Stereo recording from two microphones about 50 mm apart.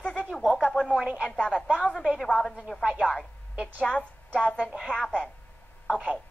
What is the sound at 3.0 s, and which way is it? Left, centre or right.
Speech, centre.